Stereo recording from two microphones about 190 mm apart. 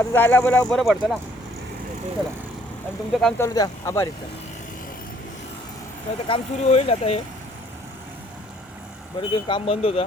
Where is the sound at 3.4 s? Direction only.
20° left (ahead or behind).